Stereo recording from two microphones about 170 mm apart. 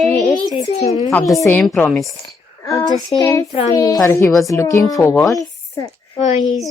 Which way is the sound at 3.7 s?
20° left (ahead or behind).